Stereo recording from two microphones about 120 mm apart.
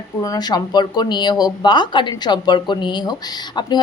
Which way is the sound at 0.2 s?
30° left (ahead or behind).